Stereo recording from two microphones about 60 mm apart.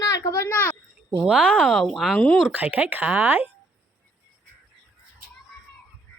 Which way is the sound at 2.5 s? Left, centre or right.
Right.